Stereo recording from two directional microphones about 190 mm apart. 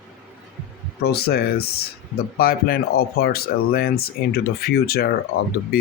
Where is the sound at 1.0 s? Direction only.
55° left (ahead or behind).